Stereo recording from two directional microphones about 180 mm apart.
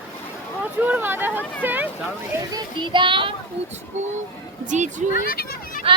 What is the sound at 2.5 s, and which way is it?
Speech, 25° right (ahead or behind).